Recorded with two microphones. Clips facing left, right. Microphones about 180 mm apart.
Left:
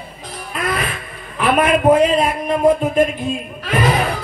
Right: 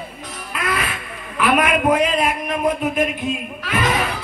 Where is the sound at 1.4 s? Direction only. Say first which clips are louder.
Left 3 dB; 30° left (ahead or behind).